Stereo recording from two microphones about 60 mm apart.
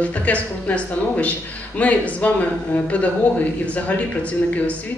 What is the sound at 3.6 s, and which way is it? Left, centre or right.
Speech, left.